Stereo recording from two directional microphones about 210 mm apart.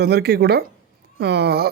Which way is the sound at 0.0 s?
50° right (ahead or behind).